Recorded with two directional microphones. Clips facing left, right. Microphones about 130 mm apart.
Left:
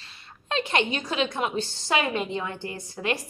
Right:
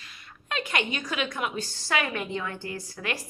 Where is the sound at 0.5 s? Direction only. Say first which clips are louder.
Left 4 dB; 25° left (ahead or behind).